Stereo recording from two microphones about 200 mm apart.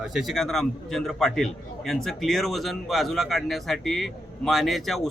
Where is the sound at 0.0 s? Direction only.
Centre (ahead or behind).